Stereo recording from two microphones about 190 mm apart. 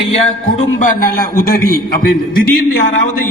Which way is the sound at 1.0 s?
50° left (ahead or behind).